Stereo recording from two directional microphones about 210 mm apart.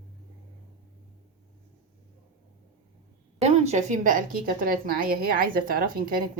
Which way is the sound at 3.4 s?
30° right (ahead or behind).